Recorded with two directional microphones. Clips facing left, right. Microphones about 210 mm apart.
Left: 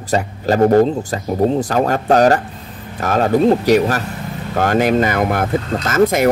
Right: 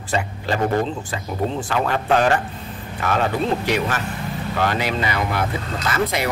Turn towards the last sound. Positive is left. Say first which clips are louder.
# left 8 dB
turn(degrees=45)  # may be behind; listen again after turning